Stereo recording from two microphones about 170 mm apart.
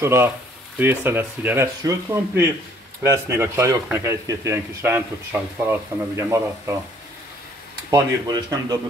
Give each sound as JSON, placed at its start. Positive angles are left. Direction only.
{"t": 0.0, "sound": "speech", "side_deg": -15}
{"t": 7.9, "sound": "speech", "side_deg": -20}